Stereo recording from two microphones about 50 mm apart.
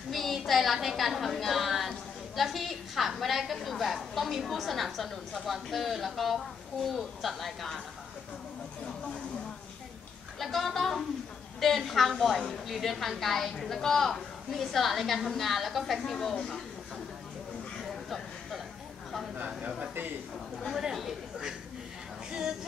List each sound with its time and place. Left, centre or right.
0.1 s a woman's voice: centre
10.4 s a woman's voice: centre
19.3 s speech: right
20.7 s a woman's voice: centre
22.3 s a sound: centre